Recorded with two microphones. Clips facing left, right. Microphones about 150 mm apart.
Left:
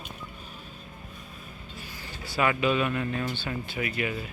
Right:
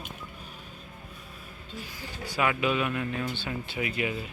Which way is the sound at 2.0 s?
15° right (ahead or behind).